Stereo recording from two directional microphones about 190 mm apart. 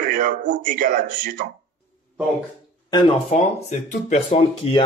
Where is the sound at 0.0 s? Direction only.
45° right (ahead or behind).